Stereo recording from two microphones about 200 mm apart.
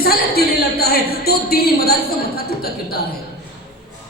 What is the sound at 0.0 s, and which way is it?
A woman's voice, 50° left (ahead or behind).